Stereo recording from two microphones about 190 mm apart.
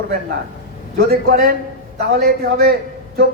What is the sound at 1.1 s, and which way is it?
A man's voice, 50° right (ahead or behind).